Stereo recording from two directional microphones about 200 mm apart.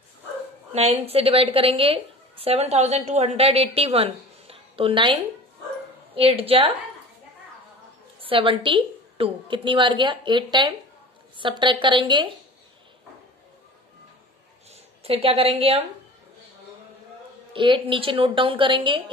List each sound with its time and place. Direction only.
0.7 s a woman's voice: 30° right (ahead or behind)
8.2 s a woman's voice: 25° right (ahead or behind)
15.0 s a woman's voice: 30° right (ahead or behind)
17.5 s a woman's voice: 25° right (ahead or behind)